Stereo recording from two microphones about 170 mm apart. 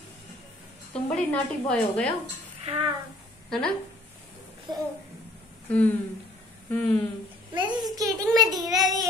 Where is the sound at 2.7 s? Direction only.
35° right (ahead or behind).